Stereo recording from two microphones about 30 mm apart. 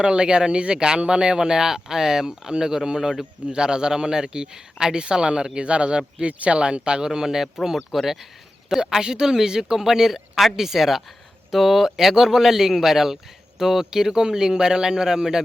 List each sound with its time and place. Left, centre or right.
0.0 s speech: right
7.0 s speech: right
8.7 s speech: centre